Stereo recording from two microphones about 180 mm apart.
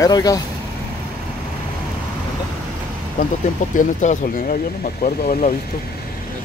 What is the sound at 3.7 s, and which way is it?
Speech, 45° left (ahead or behind).